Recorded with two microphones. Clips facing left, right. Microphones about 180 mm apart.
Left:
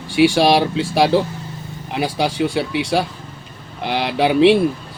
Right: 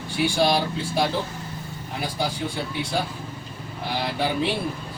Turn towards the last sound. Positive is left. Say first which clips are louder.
# left 11 dB
turn(degrees=80)